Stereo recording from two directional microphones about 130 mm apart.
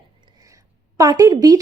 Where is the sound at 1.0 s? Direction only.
25° right (ahead or behind).